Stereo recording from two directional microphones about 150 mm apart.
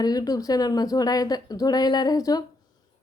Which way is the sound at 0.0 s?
25° left (ahead or behind).